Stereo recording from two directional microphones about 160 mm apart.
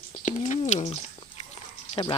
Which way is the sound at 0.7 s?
45° left (ahead or behind).